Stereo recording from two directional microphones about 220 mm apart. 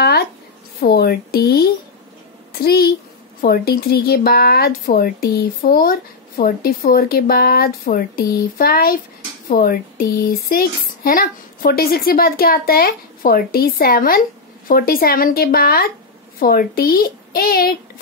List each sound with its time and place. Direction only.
0.8 s speech: 45° left (ahead or behind)